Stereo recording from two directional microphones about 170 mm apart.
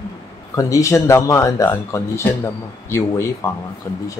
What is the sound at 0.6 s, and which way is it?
Speech, 20° left (ahead or behind).